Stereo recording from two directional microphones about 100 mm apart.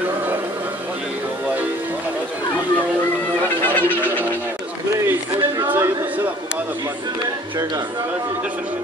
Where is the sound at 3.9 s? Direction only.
15° right (ahead or behind).